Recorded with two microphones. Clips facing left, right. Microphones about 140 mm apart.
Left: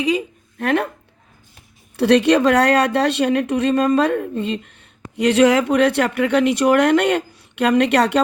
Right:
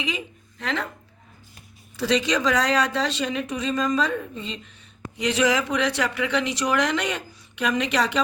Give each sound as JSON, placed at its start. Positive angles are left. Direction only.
{"t": 0.0, "sound": "speech", "side_deg": 40}
{"t": 0.6, "sound": "speech", "side_deg": 55}
{"t": 2.0, "sound": "speech", "side_deg": 60}